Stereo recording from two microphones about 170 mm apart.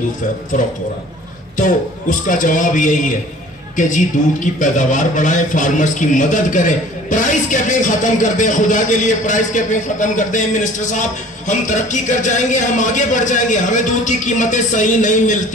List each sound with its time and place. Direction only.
1.6 s a man's voice: 50° left (ahead or behind)
4.6 s a man's voice: 50° left (ahead or behind)